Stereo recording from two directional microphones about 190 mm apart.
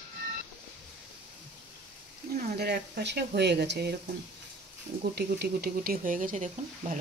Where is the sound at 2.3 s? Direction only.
55° right (ahead or behind).